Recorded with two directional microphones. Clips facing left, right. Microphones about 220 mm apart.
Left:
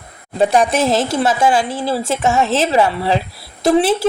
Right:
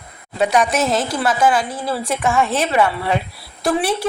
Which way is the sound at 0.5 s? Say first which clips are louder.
Left 2 dB; 30° left (ahead or behind).